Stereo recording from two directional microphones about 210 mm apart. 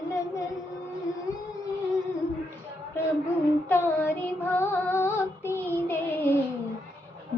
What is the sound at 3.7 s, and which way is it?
Child singing, 10° left (ahead or behind).